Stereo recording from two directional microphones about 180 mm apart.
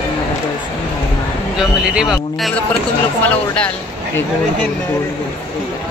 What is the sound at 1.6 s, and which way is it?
Speech, 5° right (ahead or behind).